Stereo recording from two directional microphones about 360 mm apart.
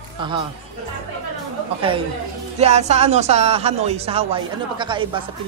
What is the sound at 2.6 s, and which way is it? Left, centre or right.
Speech, centre.